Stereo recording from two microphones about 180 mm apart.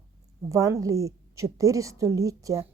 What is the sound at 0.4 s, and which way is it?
A woman's voice, 20° right (ahead or behind).